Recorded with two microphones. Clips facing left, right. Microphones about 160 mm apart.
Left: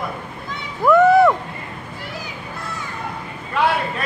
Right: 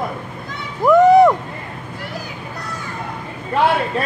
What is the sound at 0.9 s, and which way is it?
Speech, 20° right (ahead or behind).